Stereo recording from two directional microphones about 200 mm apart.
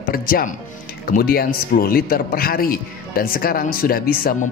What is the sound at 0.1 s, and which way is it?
A man's voice, 45° left (ahead or behind).